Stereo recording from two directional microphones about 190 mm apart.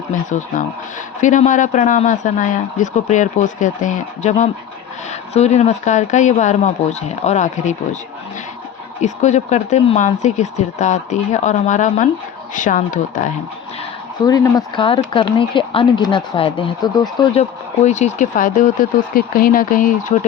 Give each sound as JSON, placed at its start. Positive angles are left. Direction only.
{"t": 0.1, "sound": "speech", "side_deg": 40}
{"t": 9.0, "sound": "speech", "side_deg": 40}
{"t": 14.3, "sound": "speech", "side_deg": 20}
{"t": 17.8, "sound": "speech", "side_deg": 35}